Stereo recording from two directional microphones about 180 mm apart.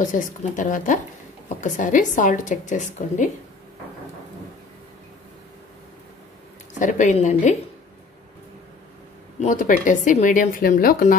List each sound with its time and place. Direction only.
0.0 s speech: 45° left (ahead or behind)
6.8 s a woman's voice: 45° left (ahead or behind)
9.4 s speech: 45° left (ahead or behind)